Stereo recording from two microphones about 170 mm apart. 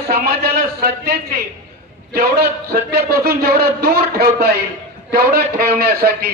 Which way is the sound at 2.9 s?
65° right (ahead or behind).